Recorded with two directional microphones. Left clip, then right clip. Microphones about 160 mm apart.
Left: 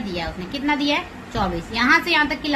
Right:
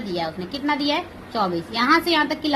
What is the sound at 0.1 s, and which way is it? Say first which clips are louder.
A woman's voice: right 3 dB; 20° right (ahead or behind).